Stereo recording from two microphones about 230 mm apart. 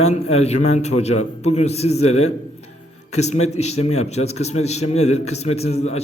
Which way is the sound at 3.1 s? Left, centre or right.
Left.